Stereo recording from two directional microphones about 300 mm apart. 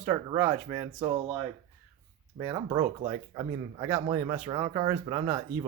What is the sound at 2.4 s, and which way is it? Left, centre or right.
Speech, centre.